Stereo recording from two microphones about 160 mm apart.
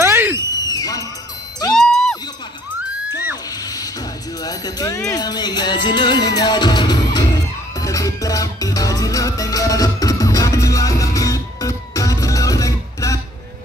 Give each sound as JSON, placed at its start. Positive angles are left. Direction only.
{"t": 0.0, "sound": "a sound", "side_deg": -15}
{"t": 0.5, "sound": "a sound", "side_deg": 25}
{"t": 1.8, "sound": "music", "side_deg": 5}
{"t": 3.6, "sound": "music", "side_deg": 25}
{"t": 4.4, "sound": "speech", "side_deg": 25}
{"t": 7.8, "sound": "music", "side_deg": 20}